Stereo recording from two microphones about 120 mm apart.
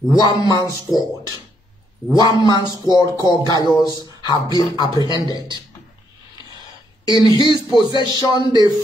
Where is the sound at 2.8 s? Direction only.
35° left (ahead or behind).